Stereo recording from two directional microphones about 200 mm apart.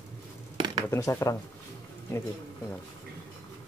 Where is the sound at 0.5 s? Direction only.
25° right (ahead or behind).